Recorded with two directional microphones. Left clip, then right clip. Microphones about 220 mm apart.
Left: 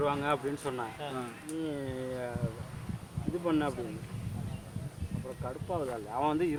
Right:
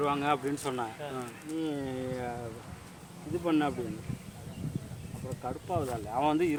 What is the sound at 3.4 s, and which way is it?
Speech, 45° right (ahead or behind).